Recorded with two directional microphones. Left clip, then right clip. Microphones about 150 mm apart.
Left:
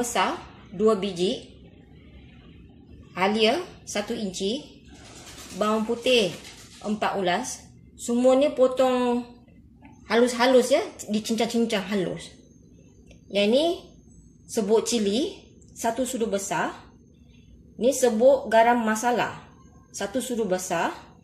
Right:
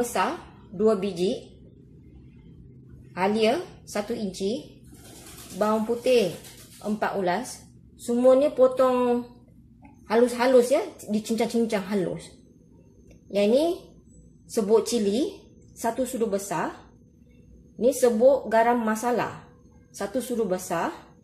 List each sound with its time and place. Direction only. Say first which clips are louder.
0.0 s a woman's voice: left 1 dB; 10° right (ahead or behind)
3.2 s a woman's voice: left 1 dB; 10° right (ahead or behind)
5.6 s a woman's voice: even; 5° right (ahead or behind)
13.3 s a woman's voice: even; 15° right (ahead or behind)
17.7 s a woman's voice: even; 15° right (ahead or behind)